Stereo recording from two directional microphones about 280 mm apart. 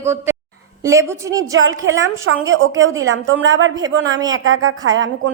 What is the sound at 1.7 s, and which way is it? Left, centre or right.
A woman's voice, right.